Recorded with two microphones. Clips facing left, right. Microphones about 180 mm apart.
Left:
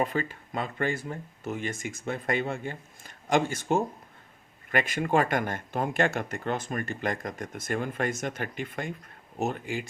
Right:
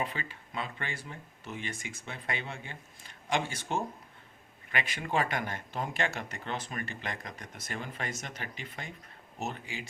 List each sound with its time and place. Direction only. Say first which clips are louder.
0.0 s speech: left 8 dB; 45° left (ahead or behind)